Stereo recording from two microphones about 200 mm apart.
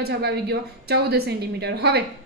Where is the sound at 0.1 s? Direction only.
55° right (ahead or behind).